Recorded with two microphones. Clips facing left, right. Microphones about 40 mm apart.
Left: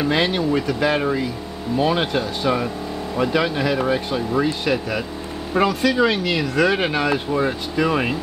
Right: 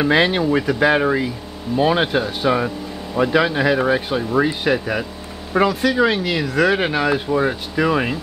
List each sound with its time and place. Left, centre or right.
0.0 s speech: right; by 8.2 s centre